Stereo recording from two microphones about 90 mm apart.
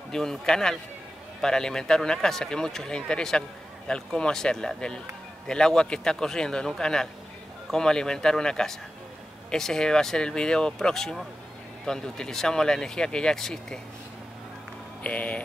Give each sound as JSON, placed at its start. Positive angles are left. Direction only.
{"t": 0.1, "sound": "speech", "side_deg": 5}
{"t": 15.0, "sound": "speech", "side_deg": 15}